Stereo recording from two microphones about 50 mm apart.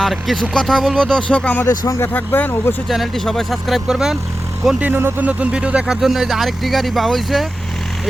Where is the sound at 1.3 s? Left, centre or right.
Left.